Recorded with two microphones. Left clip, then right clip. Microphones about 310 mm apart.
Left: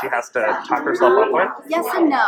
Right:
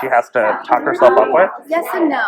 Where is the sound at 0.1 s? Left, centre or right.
Right.